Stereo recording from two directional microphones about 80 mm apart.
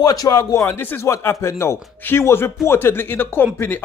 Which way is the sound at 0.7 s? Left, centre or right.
Left.